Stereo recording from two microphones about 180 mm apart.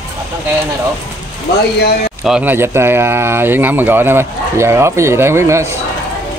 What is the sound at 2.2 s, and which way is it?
Speech, 5° right (ahead or behind).